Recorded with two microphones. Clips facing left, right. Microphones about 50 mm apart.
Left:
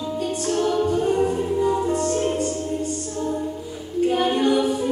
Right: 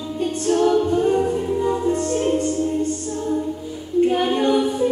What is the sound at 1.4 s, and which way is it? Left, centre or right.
Music, centre.